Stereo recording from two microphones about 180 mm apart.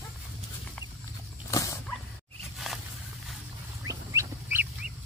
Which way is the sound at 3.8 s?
20° right (ahead or behind).